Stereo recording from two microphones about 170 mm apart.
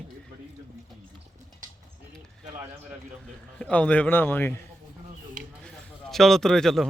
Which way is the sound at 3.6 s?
5° left (ahead or behind).